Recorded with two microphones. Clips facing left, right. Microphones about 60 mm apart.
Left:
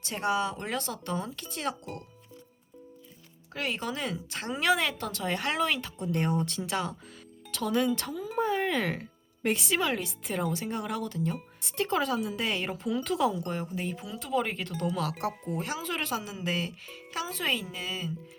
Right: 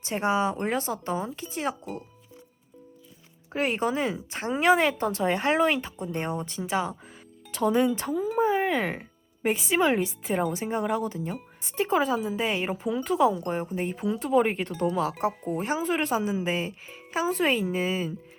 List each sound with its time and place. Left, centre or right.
0.0 s speech: right
3.5 s speech: right
6.0 s speech: centre
9.7 s speech: right